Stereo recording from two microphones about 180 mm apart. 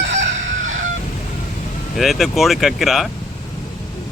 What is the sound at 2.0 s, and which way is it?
A man's voice, centre (ahead or behind).